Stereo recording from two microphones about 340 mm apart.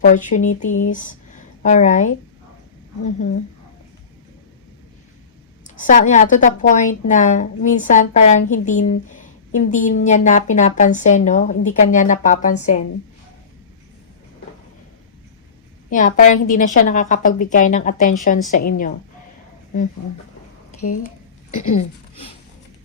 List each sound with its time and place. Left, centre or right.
0.0 s a woman's voice: left
5.6 s a woman's voice: left
15.9 s a woman's voice: left
20.7 s speech: left